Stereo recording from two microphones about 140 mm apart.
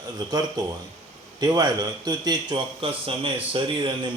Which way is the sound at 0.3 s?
30° right (ahead or behind).